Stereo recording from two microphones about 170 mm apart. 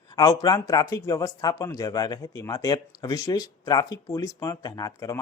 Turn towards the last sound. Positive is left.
turn(degrees=20)  # may be behind; listen again after turning